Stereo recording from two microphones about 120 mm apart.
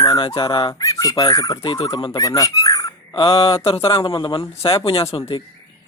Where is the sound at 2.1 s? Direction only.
30° left (ahead or behind).